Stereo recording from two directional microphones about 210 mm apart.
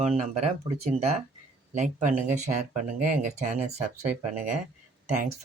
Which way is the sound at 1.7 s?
35° right (ahead or behind).